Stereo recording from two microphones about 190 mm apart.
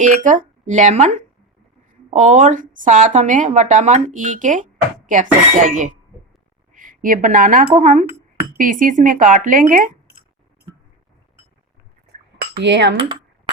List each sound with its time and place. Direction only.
0.0 s speech: 40° right (ahead or behind)
12.5 s cutlery: 65° right (ahead or behind)
13.0 s a sound: 25° right (ahead or behind)